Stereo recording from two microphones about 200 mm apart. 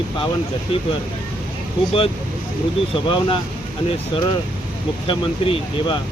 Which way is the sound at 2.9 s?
25° left (ahead or behind).